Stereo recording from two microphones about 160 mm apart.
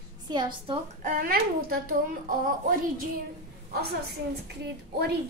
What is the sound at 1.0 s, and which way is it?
A woman's voice, 60° right (ahead or behind).